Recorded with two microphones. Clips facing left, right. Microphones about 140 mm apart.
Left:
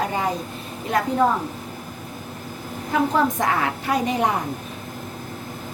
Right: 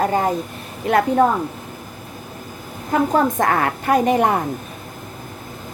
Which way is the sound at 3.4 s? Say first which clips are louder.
Right 4 dB; 55° right (ahead or behind).